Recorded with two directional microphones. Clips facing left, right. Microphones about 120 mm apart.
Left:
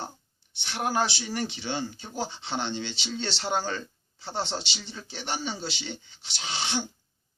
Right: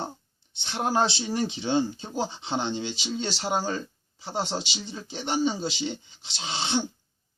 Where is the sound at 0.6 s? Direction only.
25° right (ahead or behind).